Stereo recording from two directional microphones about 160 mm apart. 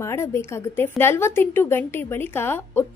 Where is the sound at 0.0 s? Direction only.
15° left (ahead or behind).